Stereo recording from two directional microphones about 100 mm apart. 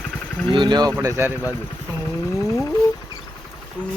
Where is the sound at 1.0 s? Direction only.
30° right (ahead or behind).